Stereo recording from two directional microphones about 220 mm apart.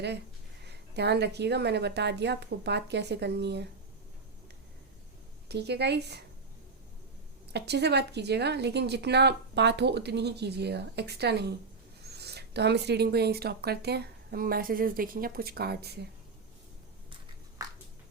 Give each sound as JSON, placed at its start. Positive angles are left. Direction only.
{"t": 0.7, "sound": "a woman's voice", "side_deg": -50}
{"t": 5.5, "sound": "a woman's voice", "side_deg": -50}
{"t": 7.5, "sound": "a woman's voice", "side_deg": -50}